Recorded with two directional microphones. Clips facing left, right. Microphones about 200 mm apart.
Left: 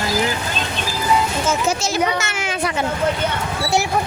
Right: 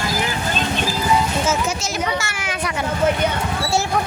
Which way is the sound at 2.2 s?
20° left (ahead or behind).